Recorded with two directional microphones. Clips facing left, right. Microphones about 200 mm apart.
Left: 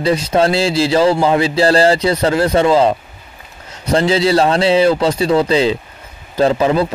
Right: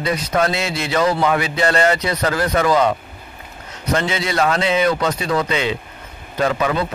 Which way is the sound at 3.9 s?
30° left (ahead or behind).